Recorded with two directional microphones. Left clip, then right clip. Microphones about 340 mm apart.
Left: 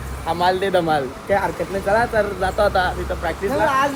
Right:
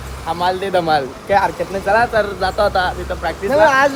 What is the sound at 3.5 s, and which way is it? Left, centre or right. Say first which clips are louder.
Speech: right 7 dB; right.